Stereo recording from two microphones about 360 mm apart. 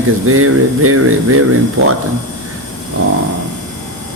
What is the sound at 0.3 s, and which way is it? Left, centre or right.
A man's voice, right.